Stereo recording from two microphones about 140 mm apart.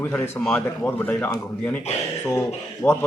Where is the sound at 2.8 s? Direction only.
15° left (ahead or behind).